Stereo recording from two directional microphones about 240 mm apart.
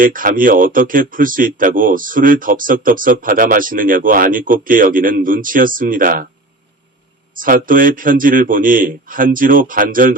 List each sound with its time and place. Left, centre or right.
0.0 s speech: right
7.3 s speech: right